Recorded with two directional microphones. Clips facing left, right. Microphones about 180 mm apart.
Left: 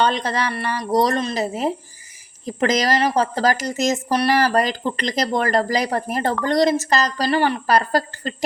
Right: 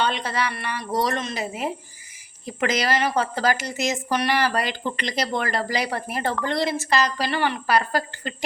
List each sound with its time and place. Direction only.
0.0 s speech: 40° left (ahead or behind)